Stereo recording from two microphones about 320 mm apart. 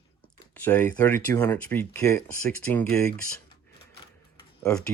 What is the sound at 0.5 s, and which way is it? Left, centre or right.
Speech, centre.